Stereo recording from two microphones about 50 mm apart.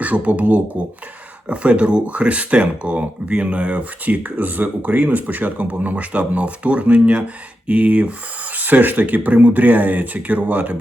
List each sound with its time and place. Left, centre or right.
0.0 s speech: right